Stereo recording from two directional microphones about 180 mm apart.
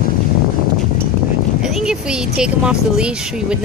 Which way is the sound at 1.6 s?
5° right (ahead or behind).